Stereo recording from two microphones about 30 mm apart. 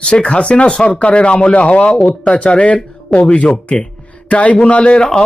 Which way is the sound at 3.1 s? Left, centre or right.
Centre.